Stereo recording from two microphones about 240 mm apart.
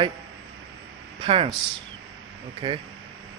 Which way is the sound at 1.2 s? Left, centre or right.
Right.